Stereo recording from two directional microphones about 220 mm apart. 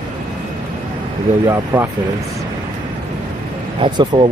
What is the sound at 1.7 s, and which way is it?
Speech, 10° right (ahead or behind).